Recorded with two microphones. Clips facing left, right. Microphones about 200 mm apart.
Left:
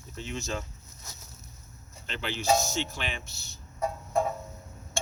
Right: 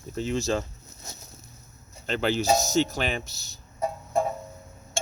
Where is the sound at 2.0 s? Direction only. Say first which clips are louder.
Right 5 dB; 40° right (ahead or behind).